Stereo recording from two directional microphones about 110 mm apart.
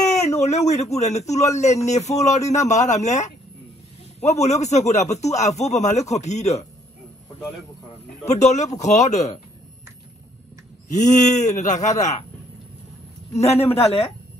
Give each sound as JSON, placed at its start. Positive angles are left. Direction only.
{"t": 0.4, "sound": "speech", "side_deg": 90}
{"t": 8.3, "sound": "speech", "side_deg": 90}
{"t": 10.9, "sound": "speech", "side_deg": 90}
{"t": 13.3, "sound": "a man's voice", "side_deg": 85}
{"t": 13.7, "sound": "speech", "side_deg": 70}